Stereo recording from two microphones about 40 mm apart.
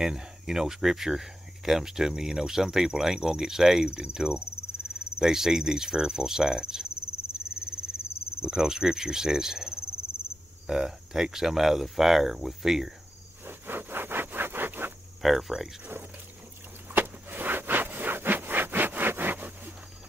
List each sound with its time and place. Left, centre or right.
0.0 s speech: centre
5.2 s speech: centre
7.3 s a sound: right
8.4 s speech: centre
13.5 s wood: right
15.2 s speech: centre
16.9 s wood: right